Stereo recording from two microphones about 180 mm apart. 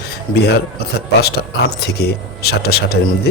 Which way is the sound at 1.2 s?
65° left (ahead or behind).